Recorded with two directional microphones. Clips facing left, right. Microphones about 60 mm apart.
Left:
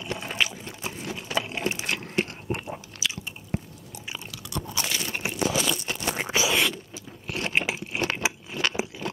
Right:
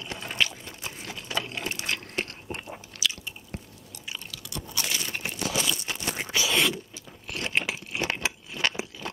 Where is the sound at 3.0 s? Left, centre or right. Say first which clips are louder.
Right 3 dB; left.